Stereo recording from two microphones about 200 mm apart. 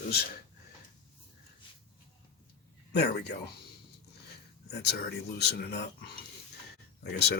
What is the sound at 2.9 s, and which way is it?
Speech, 55° left (ahead or behind).